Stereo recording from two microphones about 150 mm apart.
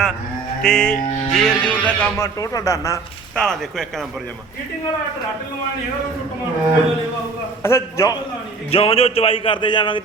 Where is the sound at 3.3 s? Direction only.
5° left (ahead or behind).